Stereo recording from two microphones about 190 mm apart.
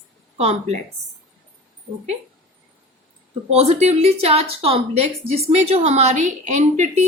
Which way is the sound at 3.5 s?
35° right (ahead or behind).